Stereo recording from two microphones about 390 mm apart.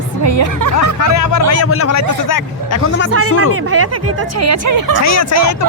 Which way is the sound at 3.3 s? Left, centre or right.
Left.